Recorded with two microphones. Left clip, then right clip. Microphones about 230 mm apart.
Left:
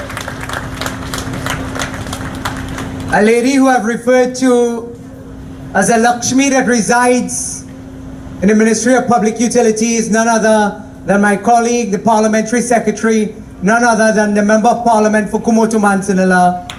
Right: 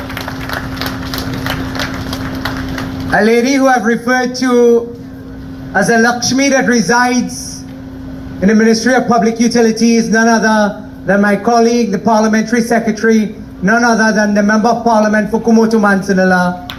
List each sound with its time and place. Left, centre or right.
3.2 s a man's voice: left
5.7 s a man's voice: left
8.4 s a man's voice: left